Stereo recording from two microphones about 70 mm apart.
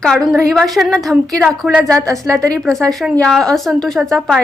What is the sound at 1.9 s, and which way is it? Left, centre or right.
Speech, right.